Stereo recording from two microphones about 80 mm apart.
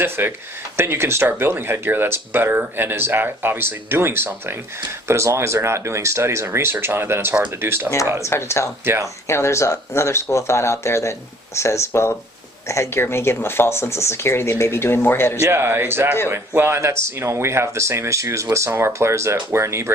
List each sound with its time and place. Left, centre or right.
0.0 s speech: right
8.2 s speech: left
8.8 s speech: right
9.2 s speech: left
15.4 s speech: right